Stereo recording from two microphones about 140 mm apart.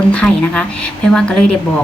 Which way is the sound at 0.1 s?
5° left (ahead or behind).